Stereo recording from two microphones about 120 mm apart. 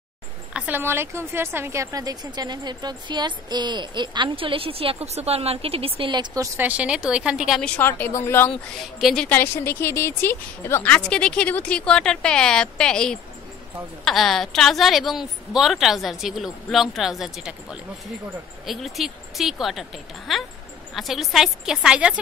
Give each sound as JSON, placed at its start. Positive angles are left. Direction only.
{"t": 0.5, "sound": "speech", "side_deg": -10}
{"t": 6.3, "sound": "speech", "side_deg": -30}
{"t": 6.6, "sound": "a woman's voice", "side_deg": -10}
{"t": 7.6, "sound": "a woman's voice", "side_deg": 15}
{"t": 9.0, "sound": "a woman's voice", "side_deg": 5}
{"t": 9.3, "sound": "a woman's voice", "side_deg": 20}